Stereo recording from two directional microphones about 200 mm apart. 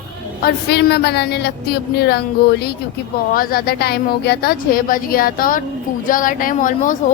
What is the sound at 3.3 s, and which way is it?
A woman's voice, 45° left (ahead or behind).